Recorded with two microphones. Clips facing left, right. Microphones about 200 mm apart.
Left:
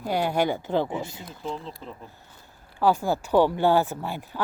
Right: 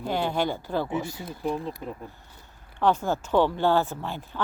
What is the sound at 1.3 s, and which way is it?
Speech, 15° right (ahead or behind).